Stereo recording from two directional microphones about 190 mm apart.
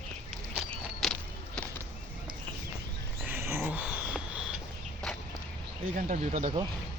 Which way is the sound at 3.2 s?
10° right (ahead or behind).